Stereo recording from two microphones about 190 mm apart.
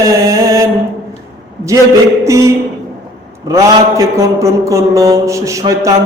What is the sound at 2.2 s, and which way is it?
Mantra, 15° right (ahead or behind).